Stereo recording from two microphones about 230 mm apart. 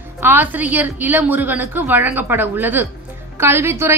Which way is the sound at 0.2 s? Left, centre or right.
Centre.